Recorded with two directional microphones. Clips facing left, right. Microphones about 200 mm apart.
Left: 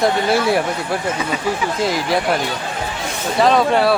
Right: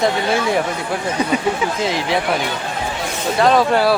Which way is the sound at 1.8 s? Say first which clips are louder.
Left 2 dB; centre (ahead or behind).